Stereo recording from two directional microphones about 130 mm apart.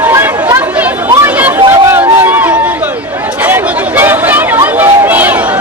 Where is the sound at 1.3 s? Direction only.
10° right (ahead or behind).